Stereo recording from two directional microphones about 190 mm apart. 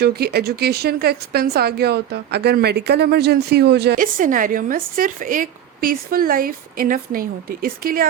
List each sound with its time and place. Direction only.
0.0 s a woman's voice: 55° right (ahead or behind)